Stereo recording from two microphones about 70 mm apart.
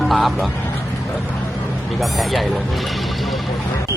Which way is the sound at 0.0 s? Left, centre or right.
Centre.